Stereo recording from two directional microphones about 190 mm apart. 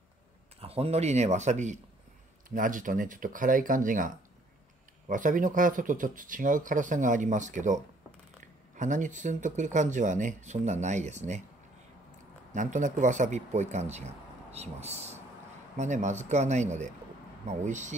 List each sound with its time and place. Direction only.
0.6 s speech: 30° right (ahead or behind)
12.5 s speech: 40° right (ahead or behind)